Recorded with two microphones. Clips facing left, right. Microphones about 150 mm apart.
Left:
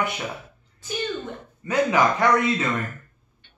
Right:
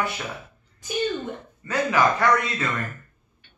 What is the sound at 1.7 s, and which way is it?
A man's voice, 20° left (ahead or behind).